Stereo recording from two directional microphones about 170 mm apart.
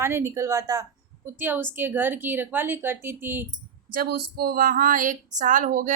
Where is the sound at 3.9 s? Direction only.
60° right (ahead or behind).